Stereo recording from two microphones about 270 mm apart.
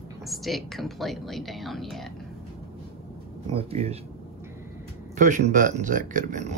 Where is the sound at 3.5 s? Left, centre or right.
Right.